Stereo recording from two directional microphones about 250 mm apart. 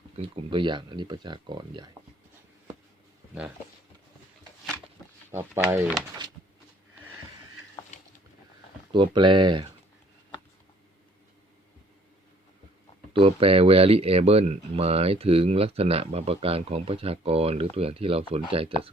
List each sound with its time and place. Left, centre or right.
0.2 s speech: centre
5.3 s speech: centre
8.9 s speech: centre
13.1 s speech: right